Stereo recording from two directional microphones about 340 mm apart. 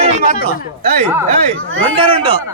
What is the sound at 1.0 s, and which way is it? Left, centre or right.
Speech, centre.